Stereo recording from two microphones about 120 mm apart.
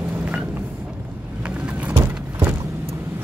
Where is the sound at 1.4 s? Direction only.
10° right (ahead or behind).